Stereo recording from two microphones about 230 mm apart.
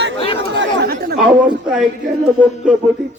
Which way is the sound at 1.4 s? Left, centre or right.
Centre.